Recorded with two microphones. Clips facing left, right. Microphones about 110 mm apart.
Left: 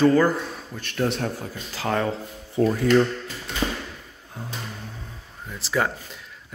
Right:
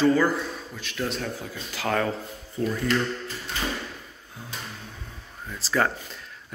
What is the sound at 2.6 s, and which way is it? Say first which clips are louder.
Speech: left 7 dB; 90° left.